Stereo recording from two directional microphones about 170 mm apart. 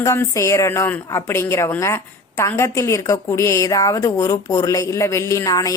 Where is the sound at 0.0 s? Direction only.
15° left (ahead or behind).